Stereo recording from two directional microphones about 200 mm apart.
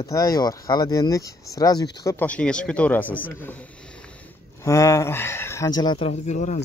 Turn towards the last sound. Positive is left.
turn(degrees=35)  # may be behind; listen again after turning